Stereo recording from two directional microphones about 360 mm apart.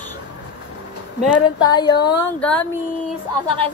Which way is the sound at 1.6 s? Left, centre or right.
Centre.